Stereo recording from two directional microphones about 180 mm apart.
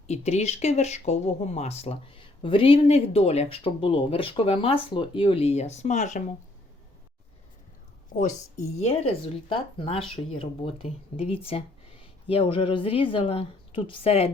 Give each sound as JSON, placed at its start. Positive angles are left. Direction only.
{"t": 0.1, "sound": "speech", "side_deg": 40}
{"t": 8.8, "sound": "speech", "side_deg": 35}